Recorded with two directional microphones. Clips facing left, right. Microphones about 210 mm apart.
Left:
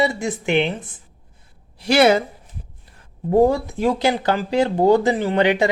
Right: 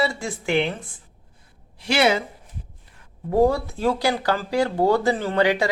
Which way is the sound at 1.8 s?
40° left (ahead or behind).